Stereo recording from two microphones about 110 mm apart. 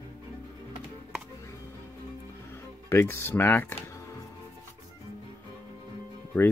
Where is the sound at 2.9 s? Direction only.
20° left (ahead or behind).